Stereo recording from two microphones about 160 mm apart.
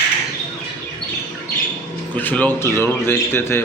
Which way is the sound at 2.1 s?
10° left (ahead or behind).